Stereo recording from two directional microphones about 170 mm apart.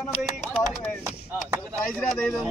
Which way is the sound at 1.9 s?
5° left (ahead or behind).